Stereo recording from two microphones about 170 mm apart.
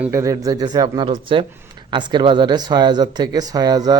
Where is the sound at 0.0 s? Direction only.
15° right (ahead or behind).